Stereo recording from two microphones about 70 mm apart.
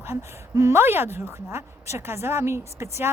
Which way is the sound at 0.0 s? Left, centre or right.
Right.